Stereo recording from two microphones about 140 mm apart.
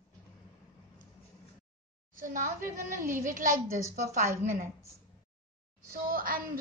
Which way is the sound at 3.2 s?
75° right (ahead or behind).